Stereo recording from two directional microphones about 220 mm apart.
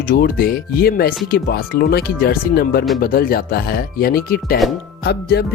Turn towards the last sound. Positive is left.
turn(degrees=50)  # may be behind; listen again after turning